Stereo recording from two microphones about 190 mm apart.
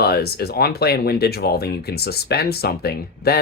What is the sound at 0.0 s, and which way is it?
Speech, 55° left (ahead or behind).